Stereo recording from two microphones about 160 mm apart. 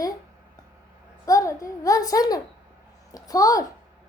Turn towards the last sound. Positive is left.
turn(degrees=20)  # may be behind; listen again after turning